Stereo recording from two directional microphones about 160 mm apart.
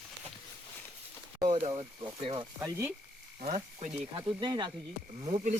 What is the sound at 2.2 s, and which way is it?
Speech, 30° right (ahead or behind).